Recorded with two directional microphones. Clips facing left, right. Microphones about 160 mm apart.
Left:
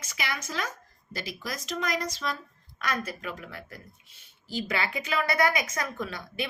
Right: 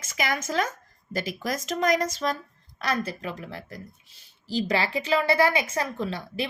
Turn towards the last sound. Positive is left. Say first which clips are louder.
# right 4 dB
turn(degrees=-30)  # may be behind; listen again after turning